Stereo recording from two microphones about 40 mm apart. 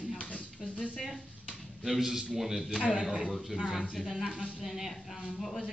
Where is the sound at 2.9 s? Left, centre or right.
Centre.